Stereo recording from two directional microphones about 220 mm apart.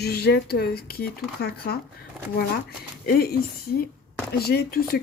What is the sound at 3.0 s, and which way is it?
Speech, 45° left (ahead or behind).